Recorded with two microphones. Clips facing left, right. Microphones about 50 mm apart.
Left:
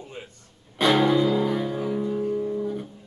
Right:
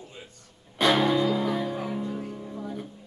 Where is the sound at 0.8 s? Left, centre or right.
Centre.